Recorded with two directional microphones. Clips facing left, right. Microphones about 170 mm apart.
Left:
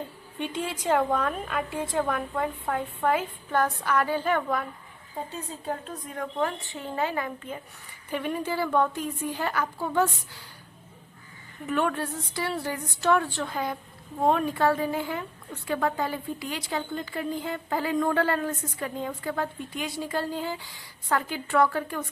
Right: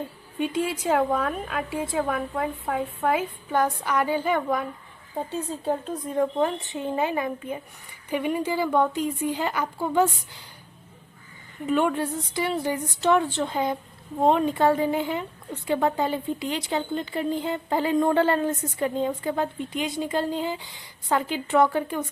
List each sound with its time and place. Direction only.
0.3 s a woman's voice: 10° right (ahead or behind)
6.1 s a woman's voice: 25° right (ahead or behind)
11.6 s speech: 15° right (ahead or behind)